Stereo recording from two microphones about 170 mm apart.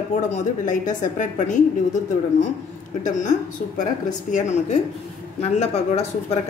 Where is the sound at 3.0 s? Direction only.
50° left (ahead or behind).